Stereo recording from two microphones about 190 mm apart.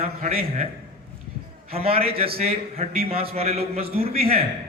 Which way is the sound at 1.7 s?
30° right (ahead or behind).